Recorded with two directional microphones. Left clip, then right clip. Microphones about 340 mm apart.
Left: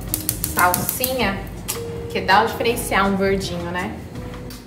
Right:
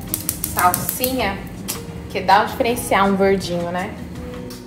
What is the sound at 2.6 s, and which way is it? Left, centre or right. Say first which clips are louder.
Speech: right 2 dB; centre.